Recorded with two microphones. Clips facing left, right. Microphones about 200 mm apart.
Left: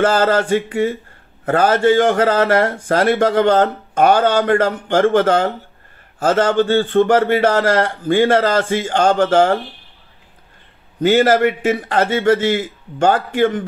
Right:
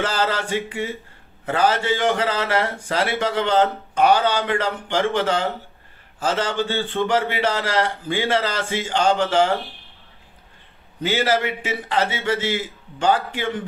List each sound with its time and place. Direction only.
0.0 s a man's voice: 50° left (ahead or behind)
11.0 s a man's voice: 50° left (ahead or behind)